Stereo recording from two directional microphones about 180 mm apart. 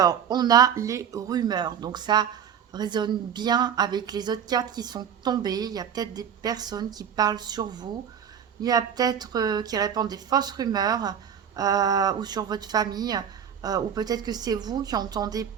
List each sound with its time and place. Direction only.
0.0 s speech: 20° right (ahead or behind)